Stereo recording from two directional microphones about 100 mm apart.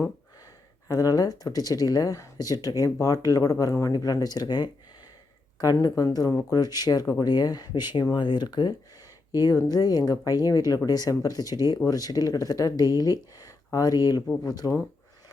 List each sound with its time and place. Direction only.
0.9 s speech: 40° left (ahead or behind)
6.0 s speech: 35° left (ahead or behind)
9.3 s speech: 35° left (ahead or behind)